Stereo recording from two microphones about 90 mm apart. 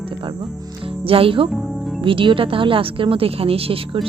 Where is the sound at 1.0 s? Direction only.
90° right.